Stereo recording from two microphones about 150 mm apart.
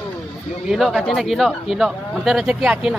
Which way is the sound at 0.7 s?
Centre (ahead or behind).